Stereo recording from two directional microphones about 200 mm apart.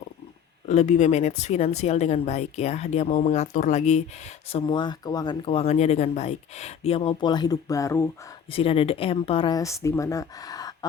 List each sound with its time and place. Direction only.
0.7 s speech: 35° left (ahead or behind); by 8.1 s 15° left (ahead or behind)
8.4 s speech: 30° left (ahead or behind)